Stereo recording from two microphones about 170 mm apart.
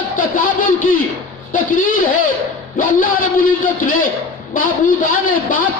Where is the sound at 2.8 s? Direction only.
55° left (ahead or behind).